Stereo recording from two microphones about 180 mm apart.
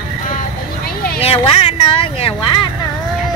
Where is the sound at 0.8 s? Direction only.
60° left (ahead or behind).